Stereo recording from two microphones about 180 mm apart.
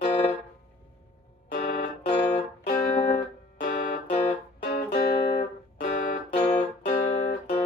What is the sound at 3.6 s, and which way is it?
Music, 55° left (ahead or behind).